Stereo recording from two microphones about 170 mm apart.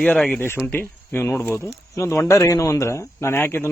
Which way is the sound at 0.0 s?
5° left (ahead or behind).